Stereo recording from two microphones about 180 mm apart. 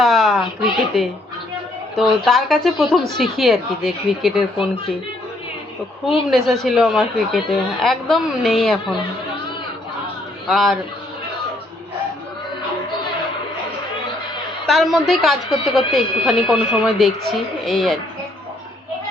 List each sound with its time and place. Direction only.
0.0 s a woman's voice: centre (ahead or behind)
6.2 s a woman's voice: centre (ahead or behind)
10.5 s a woman's voice: centre (ahead or behind)
14.7 s a woman's voice: centre (ahead or behind)